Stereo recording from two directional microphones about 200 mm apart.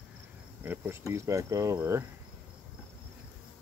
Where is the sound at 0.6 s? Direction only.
10° right (ahead or behind).